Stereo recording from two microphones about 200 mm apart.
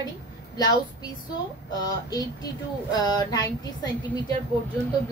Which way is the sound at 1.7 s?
20° left (ahead or behind).